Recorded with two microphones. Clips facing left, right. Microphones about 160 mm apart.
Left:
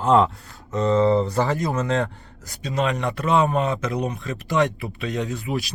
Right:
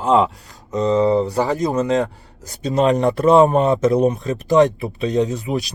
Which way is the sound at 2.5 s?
40° right (ahead or behind).